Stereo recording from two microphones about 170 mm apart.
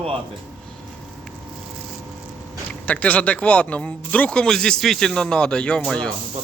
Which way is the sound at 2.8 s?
10° left (ahead or behind).